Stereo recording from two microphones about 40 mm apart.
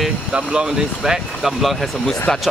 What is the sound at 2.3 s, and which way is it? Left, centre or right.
Speech, centre.